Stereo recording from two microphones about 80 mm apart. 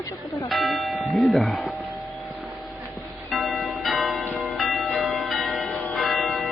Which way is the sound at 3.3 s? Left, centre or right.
Centre.